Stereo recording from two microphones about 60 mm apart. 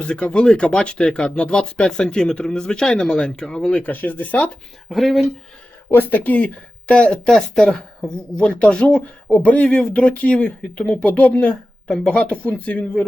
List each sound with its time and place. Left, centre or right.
0.0 s speech: centre
3.7 s speech: left
4.9 s speech: centre
5.9 s speech: left
11.3 s a woman's voice: centre